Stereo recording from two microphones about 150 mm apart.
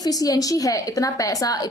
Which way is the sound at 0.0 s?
25° left (ahead or behind).